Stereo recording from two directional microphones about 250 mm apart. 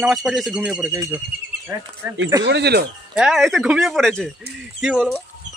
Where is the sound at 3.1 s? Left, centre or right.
Centre.